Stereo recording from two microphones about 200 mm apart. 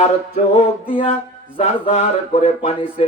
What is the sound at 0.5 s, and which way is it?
A man's voice, 30° left (ahead or behind).